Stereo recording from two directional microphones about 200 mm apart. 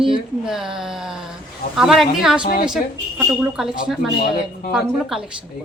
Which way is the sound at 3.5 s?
Centre (ahead or behind).